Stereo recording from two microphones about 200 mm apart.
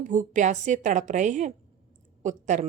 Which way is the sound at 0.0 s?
40° right (ahead or behind).